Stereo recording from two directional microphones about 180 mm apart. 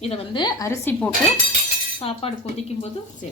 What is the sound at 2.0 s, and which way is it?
Speech, 30° left (ahead or behind).